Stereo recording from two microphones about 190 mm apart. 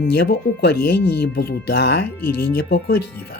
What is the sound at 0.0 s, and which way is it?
Speech, 60° left (ahead or behind).